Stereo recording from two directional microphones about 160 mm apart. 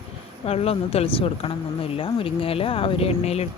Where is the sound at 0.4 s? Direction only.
40° left (ahead or behind).